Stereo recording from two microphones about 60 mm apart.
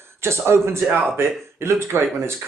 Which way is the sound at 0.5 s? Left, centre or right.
Right.